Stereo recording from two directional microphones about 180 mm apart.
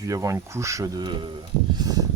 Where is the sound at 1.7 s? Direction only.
20° right (ahead or behind).